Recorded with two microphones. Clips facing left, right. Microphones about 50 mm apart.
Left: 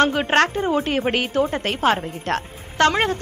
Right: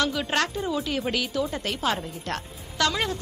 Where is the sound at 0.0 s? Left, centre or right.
Left.